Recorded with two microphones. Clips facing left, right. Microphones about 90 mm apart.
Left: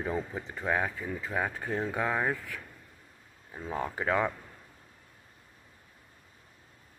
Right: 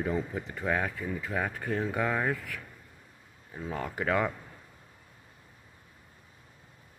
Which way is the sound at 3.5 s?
20° left (ahead or behind).